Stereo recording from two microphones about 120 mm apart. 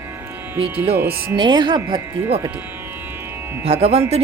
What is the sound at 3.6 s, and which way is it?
Speech, 55° right (ahead or behind).